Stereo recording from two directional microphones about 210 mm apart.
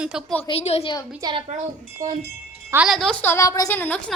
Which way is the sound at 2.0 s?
40° right (ahead or behind).